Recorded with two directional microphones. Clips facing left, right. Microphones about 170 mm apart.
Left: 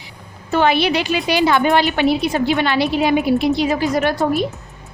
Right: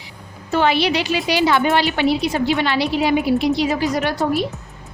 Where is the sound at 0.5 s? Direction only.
50° left (ahead or behind).